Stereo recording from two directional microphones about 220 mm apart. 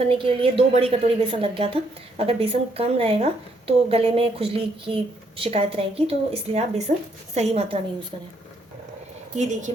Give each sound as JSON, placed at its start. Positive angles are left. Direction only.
{"t": 0.1, "sound": "a woman's voice", "side_deg": -25}
{"t": 9.4, "sound": "a woman's voice", "side_deg": -35}